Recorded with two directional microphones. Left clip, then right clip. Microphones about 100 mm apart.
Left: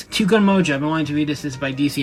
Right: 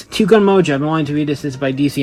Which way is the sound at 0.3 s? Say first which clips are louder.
Right 6 dB; 35° right (ahead or behind).